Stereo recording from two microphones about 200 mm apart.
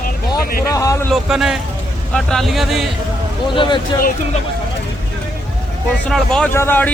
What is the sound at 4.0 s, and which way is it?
Speech, 45° left (ahead or behind).